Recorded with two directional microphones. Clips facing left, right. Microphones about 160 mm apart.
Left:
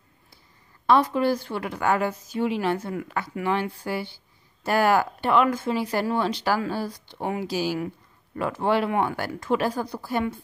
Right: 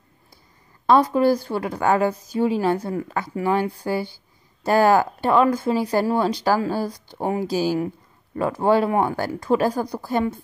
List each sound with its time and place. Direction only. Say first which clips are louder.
0.8 s a woman's voice: right 4 dB; 40° right (ahead or behind)